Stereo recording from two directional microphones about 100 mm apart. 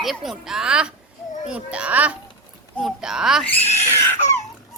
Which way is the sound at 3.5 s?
20° left (ahead or behind).